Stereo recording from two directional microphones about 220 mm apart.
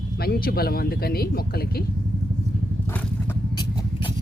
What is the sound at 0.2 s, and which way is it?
Speech, 45° left (ahead or behind).